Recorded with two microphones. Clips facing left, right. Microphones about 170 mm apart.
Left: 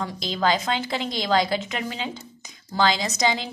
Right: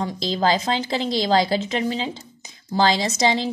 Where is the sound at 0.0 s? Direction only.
30° right (ahead or behind).